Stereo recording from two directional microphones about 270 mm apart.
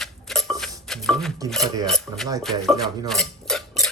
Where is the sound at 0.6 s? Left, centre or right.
Centre.